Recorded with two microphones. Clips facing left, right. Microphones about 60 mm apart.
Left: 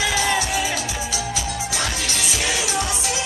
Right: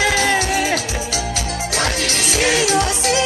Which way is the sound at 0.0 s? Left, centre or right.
Right.